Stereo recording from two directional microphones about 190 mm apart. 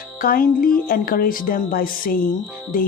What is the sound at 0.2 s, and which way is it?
Speech, 50° left (ahead or behind).